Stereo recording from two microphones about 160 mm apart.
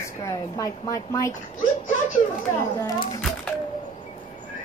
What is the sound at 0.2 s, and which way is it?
A woman's voice, 20° left (ahead or behind).